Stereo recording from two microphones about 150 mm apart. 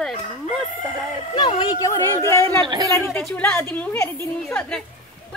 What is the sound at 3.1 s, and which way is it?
A woman's voice, 5° left (ahead or behind).